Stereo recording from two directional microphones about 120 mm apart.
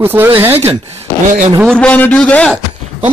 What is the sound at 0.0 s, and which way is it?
Speech, 20° right (ahead or behind).